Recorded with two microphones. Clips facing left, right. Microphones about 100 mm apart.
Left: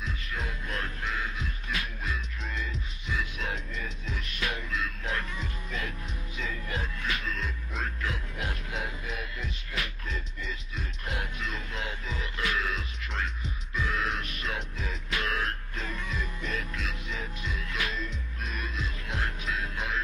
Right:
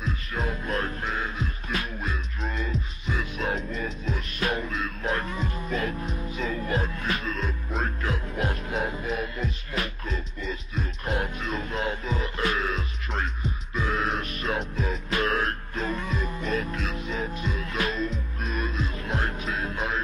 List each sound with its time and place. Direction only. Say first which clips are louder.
0.0 s music: right 6 dB; 40° right (ahead or behind)